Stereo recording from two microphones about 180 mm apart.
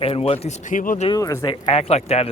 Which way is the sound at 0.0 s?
35° left (ahead or behind).